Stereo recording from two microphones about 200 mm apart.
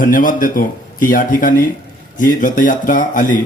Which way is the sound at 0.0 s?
40° left (ahead or behind).